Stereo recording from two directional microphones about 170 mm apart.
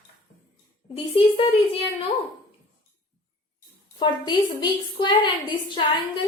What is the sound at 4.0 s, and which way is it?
A woman's voice, 25° left (ahead or behind).